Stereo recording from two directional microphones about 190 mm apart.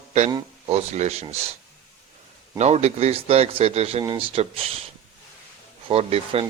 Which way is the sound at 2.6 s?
35° right (ahead or behind).